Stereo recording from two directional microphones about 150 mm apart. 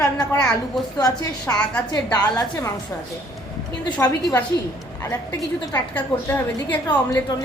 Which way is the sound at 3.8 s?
25° left (ahead or behind).